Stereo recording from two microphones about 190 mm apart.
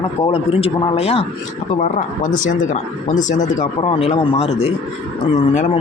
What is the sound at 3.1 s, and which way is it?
Speech, 40° left (ahead or behind).